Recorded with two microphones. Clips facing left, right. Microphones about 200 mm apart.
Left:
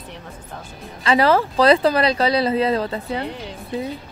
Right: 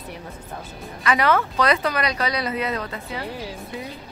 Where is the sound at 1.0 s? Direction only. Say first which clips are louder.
Left 4 dB; 30° left (ahead or behind).